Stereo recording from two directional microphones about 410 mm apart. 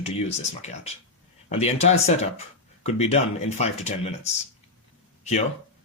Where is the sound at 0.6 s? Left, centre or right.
Centre.